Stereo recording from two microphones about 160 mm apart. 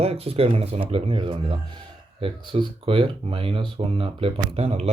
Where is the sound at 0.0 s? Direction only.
40° right (ahead or behind).